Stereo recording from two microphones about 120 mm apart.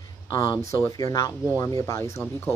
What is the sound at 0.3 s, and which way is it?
Speech, 30° left (ahead or behind).